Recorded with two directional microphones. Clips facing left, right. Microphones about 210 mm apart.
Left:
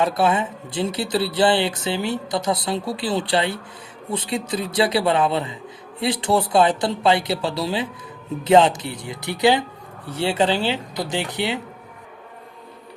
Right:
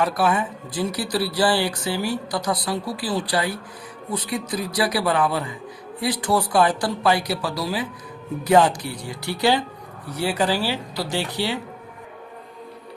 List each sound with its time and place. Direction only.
0.0 s speech: 25° left (ahead or behind)